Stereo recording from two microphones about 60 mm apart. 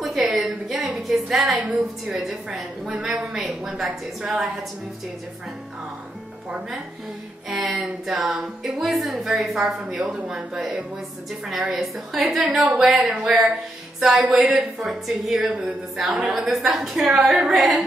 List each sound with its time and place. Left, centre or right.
0.0 s a sound: centre
2.0 s a woman's voice: centre
7.4 s a woman's voice: centre
9.9 s a woman's voice: centre
13.9 s music: centre
14.3 s a woman's voice: centre
15.4 s a sound: right
16.2 s a woman's voice: centre